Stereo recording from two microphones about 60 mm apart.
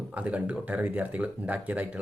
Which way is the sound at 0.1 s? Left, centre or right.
Right.